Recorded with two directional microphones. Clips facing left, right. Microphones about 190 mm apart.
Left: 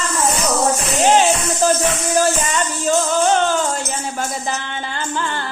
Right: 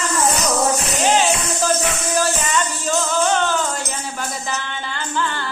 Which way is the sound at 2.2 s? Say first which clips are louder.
Left 2 dB; 50° left (ahead or behind).